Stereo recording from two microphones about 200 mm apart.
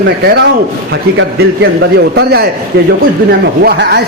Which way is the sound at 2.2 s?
55° right (ahead or behind).